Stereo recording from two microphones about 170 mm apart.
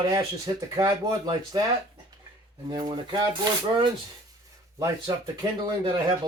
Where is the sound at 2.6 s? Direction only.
25° right (ahead or behind).